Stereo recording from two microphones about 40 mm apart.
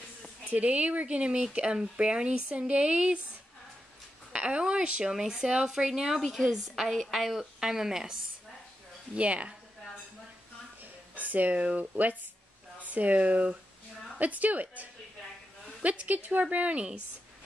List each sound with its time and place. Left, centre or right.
0.5 s speech: right
4.3 s a woman's voice: right; by 8.2 s centre
9.1 s speech: right
10.8 s a sound: right
12.8 s a woman's voice: right